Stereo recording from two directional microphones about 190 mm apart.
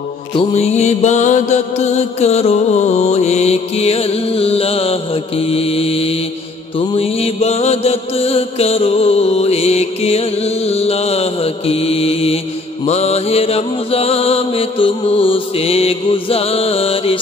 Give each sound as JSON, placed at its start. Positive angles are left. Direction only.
{"t": 0.3, "sound": "music", "side_deg": 30}
{"t": 7.0, "sound": "mantra", "side_deg": 30}
{"t": 12.8, "sound": "music", "side_deg": 35}